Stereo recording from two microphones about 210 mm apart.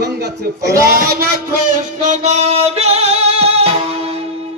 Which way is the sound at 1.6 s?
30° right (ahead or behind).